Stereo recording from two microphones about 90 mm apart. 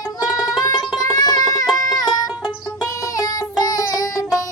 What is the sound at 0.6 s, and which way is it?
Music, 45° left (ahead or behind).